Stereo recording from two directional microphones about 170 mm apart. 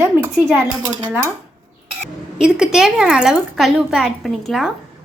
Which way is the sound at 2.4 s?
5° right (ahead or behind).